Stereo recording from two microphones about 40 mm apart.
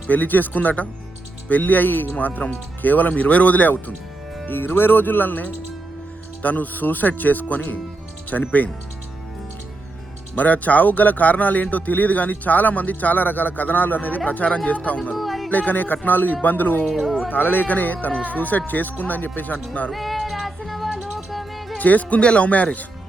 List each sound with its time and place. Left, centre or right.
0.1 s speech: left
4.4 s speech: left
8.3 s speech: left
10.3 s speech: left
15.1 s music: centre
15.4 s speech: left
16.8 s speech: centre
17.2 s speech: left
19.9 s music: centre
21.8 s speech: left